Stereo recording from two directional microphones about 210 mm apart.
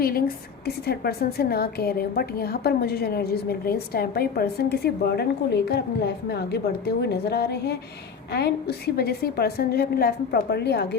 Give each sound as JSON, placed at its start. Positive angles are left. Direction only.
{"t": 0.0, "sound": "a woman's voice", "side_deg": 45}